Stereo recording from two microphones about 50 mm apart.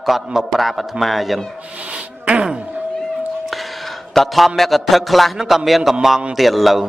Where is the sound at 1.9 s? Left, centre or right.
Right.